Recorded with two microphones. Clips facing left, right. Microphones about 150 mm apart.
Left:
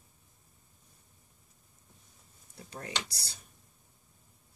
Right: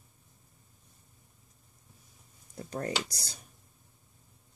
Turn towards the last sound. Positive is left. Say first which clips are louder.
# right 5 dB
turn(degrees=-45)  # may be behind; listen again after turning